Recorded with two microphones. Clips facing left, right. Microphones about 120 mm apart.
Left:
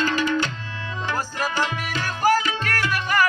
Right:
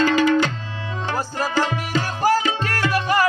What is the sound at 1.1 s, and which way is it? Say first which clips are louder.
Music: right 3 dB; 30° right (ahead or behind).